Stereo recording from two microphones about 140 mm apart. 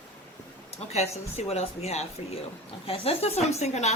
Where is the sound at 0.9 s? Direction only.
50° left (ahead or behind).